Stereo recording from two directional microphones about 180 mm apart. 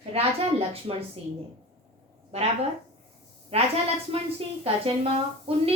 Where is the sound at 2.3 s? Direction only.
35° right (ahead or behind).